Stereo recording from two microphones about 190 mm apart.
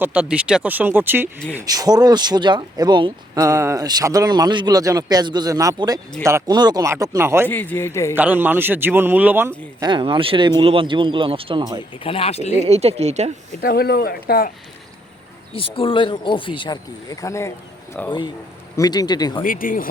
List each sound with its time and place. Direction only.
0.0 s a man's voice: 5° right (ahead or behind)
7.4 s a man's voice: 10° left (ahead or behind)
8.1 s a man's voice: 10° right (ahead or behind)
9.8 s speech: 25° right (ahead or behind)
12.0 s speech: 30° left (ahead or behind)
12.5 s speech: 35° right (ahead or behind)
13.6 s speech: 50° left (ahead or behind)
15.5 s speech: 30° left (ahead or behind)
18.0 s speech: 5° left (ahead or behind)
18.8 s speech: 20° left (ahead or behind)
19.4 s speech: 45° left (ahead or behind)